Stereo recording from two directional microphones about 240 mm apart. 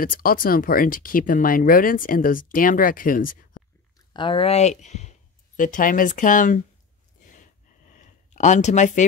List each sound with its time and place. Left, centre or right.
0.0 s speech: left
4.1 s speech: centre
7.2 s a sound: left